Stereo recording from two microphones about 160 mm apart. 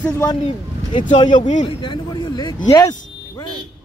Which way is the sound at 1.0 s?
50° left (ahead or behind).